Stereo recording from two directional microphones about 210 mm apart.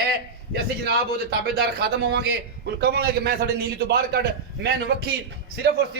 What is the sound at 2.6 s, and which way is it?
A man's voice, 50° right (ahead or behind).